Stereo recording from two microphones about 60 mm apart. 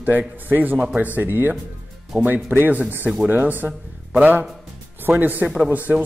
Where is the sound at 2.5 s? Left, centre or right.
Right.